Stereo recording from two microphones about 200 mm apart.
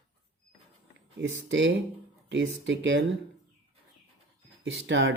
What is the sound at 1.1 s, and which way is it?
Speech, 65° right (ahead or behind).